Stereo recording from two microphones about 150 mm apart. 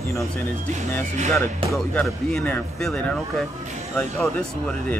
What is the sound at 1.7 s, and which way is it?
Speech, 5° left (ahead or behind).